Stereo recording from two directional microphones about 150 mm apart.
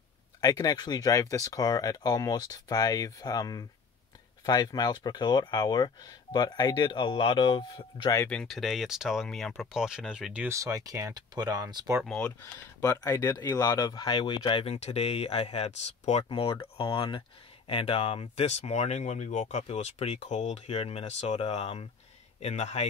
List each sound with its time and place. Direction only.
0.4 s speech: 25° left (ahead or behind)
8.3 s speech: 5° left (ahead or behind)
10.5 s speech: 25° right (ahead or behind)
12.0 s speech: 5° left (ahead or behind)
12.8 s speech: 20° left (ahead or behind); by 22.8 s 45° left (ahead or behind)